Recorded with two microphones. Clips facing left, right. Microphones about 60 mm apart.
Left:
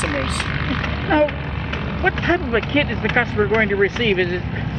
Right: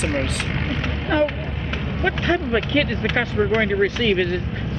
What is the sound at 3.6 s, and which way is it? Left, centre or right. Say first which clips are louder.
Speech: left 3 dB; left.